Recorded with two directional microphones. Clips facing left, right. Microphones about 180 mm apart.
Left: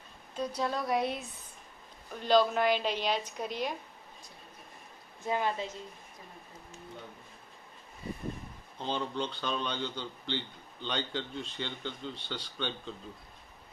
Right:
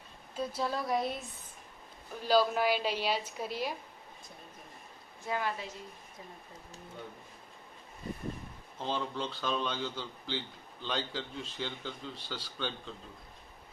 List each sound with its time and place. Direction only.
0.3 s a man's voice: 5° right (ahead or behind)
5.2 s a woman's voice: 20° left (ahead or behind)
8.8 s a man's voice: centre (ahead or behind)